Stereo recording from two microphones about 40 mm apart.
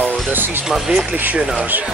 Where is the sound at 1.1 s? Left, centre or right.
Right.